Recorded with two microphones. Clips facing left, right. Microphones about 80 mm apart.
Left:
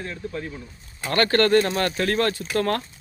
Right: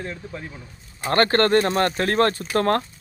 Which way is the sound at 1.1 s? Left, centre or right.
Right.